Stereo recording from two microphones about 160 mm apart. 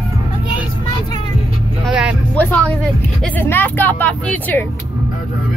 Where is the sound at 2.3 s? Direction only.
10° left (ahead or behind).